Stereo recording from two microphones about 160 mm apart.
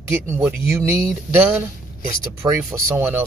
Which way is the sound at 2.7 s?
15° right (ahead or behind).